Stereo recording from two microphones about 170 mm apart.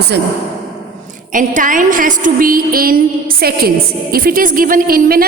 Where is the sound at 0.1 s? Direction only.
80° right.